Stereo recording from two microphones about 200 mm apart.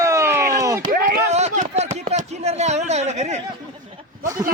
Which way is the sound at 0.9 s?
50° right (ahead or behind).